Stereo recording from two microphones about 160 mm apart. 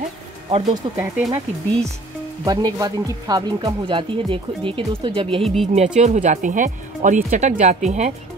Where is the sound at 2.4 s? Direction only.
25° right (ahead or behind).